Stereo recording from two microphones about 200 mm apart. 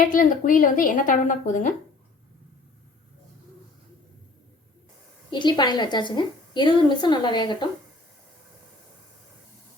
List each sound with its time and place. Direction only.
0.0 s a woman's voice: 45° left (ahead or behind)
5.3 s a woman's voice: 20° left (ahead or behind)